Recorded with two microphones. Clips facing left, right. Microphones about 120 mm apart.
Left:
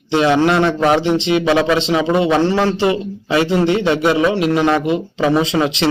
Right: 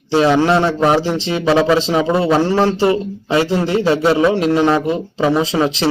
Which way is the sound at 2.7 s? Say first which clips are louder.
Right 2 dB; 35° right (ahead or behind).